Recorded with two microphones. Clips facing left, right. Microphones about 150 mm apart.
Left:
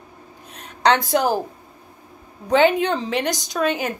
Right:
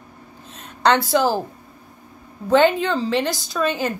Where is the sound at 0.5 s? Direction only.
15° left (ahead or behind).